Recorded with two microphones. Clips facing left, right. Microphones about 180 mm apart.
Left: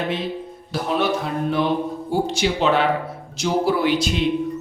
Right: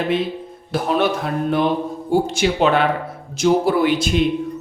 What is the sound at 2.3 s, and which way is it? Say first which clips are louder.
Speech: right 2 dB; 55° right (ahead or behind).